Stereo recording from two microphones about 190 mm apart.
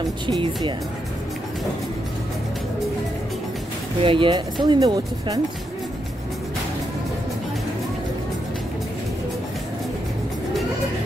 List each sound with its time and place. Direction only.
0.3 s speech: 25° right (ahead or behind)
4.0 s speech: 25° right (ahead or behind)